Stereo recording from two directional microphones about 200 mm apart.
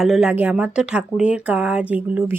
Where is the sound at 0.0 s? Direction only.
Centre (ahead or behind).